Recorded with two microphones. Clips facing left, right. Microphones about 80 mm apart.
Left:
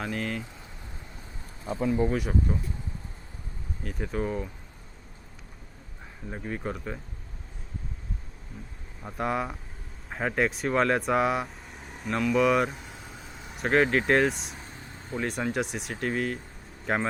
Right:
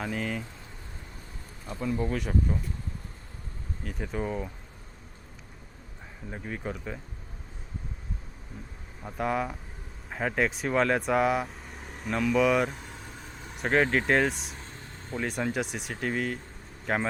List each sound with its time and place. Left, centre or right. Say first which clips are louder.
0.0 s speech: even; centre
1.9 s speech: left 4 dB; left
2.1 s speech: left 1 dB; centre
3.8 s speech: left 2 dB; centre
6.3 s speech: left 2 dB; centre
9.0 s speech: even; centre